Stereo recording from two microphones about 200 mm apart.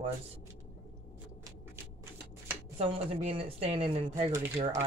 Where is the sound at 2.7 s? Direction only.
30° right (ahead or behind).